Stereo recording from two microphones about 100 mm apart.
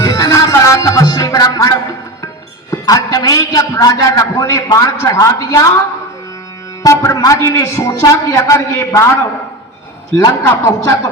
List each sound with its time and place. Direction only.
0.0 s music: 35° left (ahead or behind)
2.6 s a man's voice: 35° left (ahead or behind)
6.8 s a man's voice: 30° left (ahead or behind)
10.2 s speech: 30° left (ahead or behind)